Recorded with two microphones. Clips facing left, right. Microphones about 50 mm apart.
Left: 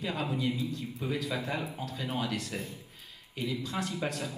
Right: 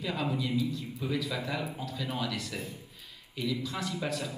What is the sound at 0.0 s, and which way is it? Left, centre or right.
A man's voice, left.